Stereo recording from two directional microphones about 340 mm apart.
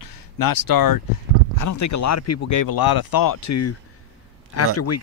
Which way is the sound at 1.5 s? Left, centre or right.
Left.